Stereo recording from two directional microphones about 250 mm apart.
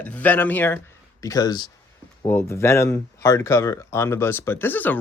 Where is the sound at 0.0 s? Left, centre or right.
Centre.